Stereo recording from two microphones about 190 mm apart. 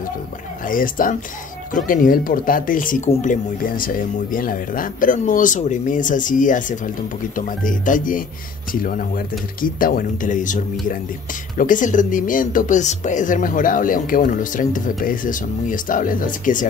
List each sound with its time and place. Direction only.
0.7 s speech: 45° left (ahead or behind)
9.6 s speech: 50° left (ahead or behind)